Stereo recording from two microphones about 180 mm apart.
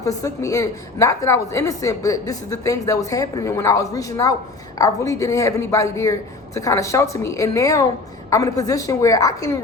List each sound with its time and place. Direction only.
0.0 s a woman's voice: 20° left (ahead or behind)